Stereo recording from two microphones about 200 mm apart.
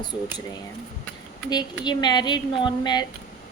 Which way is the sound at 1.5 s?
20° left (ahead or behind).